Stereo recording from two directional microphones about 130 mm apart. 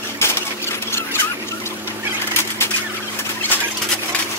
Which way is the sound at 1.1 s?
15° left (ahead or behind).